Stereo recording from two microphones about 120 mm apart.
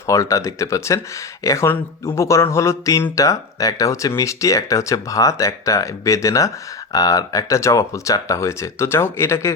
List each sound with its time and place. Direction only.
0.1 s speech: 25° left (ahead or behind)